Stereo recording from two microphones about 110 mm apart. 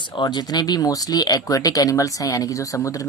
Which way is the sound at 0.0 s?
45° left (ahead or behind).